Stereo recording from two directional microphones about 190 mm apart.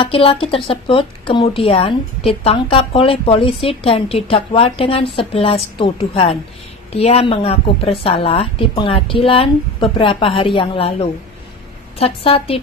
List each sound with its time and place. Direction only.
0.0 s a woman's voice: 30° left (ahead or behind)